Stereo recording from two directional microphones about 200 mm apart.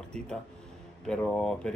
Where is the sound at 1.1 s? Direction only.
5° left (ahead or behind).